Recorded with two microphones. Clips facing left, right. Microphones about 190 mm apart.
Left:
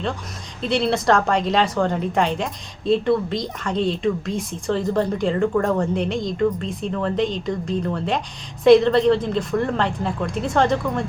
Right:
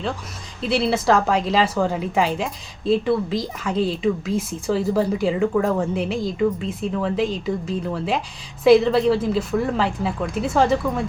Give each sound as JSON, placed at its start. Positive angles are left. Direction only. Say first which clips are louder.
{"t": 0.6, "sound": "a woman's voice", "louder": "even", "side_deg": -5}